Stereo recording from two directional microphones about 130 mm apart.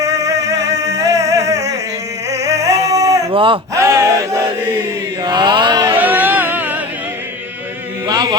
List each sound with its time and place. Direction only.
0.0 s a sound: 25° right (ahead or behind)
2.3 s singing: 25° right (ahead or behind)
3.3 s speech: 40° right (ahead or behind)
3.8 s chant: 25° right (ahead or behind)
5.2 s mantra: 35° right (ahead or behind)
5.9 s music: 15° right (ahead or behind)
8.0 s chant: 30° right (ahead or behind)